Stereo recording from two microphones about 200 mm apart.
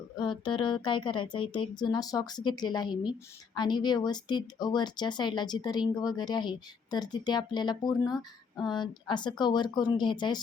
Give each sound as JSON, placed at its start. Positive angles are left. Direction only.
{"t": 0.2, "sound": "speech", "side_deg": 25}